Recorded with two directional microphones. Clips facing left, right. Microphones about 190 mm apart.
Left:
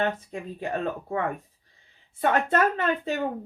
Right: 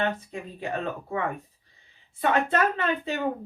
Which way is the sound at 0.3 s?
45° left (ahead or behind).